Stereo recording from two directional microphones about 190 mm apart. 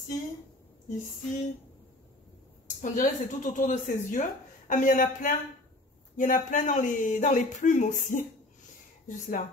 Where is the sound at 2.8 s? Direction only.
40° left (ahead or behind).